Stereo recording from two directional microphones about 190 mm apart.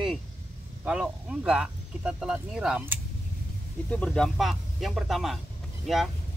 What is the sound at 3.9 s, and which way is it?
Speech, 5° left (ahead or behind).